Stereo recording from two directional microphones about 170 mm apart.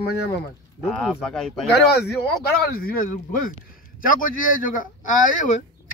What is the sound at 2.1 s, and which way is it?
Speech, 60° left (ahead or behind).